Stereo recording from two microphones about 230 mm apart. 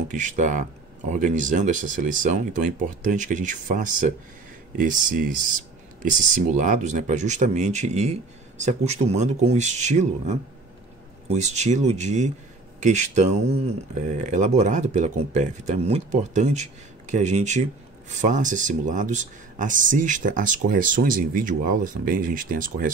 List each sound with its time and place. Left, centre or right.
0.1 s speech: right